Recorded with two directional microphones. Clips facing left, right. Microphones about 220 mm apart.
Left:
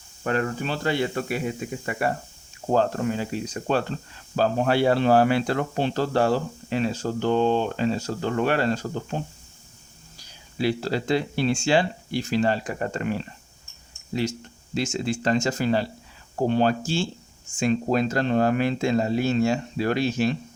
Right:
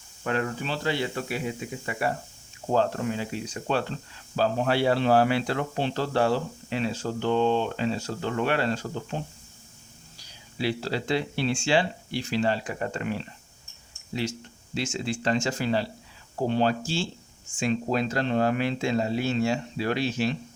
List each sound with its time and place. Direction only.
0.3 s speech: 45° left (ahead or behind)
10.6 s speech: 45° left (ahead or behind)